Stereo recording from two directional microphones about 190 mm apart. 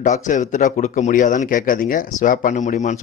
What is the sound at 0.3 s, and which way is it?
A man's voice, 40° left (ahead or behind).